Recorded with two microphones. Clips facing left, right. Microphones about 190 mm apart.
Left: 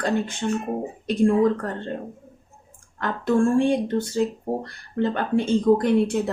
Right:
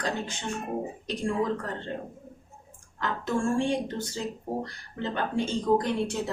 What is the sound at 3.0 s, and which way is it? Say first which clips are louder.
Speech: left 8 dB; 55° left (ahead or behind).